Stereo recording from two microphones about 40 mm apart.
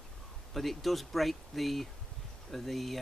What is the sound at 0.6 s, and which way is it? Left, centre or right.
Speech, centre.